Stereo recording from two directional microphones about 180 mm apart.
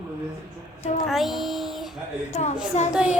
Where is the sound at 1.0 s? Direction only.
Centre (ahead or behind).